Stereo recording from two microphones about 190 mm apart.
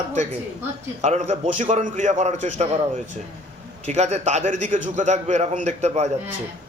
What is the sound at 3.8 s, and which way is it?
A man's voice, 35° right (ahead or behind).